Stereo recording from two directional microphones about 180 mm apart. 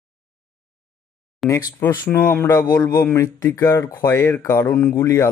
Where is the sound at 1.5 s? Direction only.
15° left (ahead or behind).